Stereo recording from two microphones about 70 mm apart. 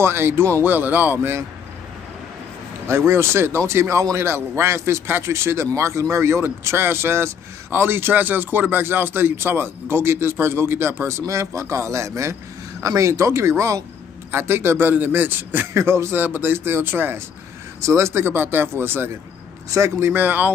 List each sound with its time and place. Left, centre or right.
0.0 s speech: right
0.7 s speech: right
3.1 s speech: right
14.3 s speech: right
17.8 s speech: right
19.7 s speech: right
20.1 s speech: right